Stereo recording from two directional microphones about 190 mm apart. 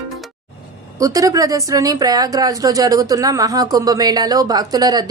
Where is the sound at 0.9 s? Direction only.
15° right (ahead or behind).